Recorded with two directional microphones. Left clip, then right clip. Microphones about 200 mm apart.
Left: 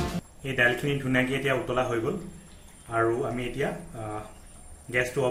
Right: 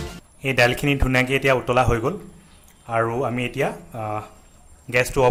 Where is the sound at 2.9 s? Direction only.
55° right (ahead or behind).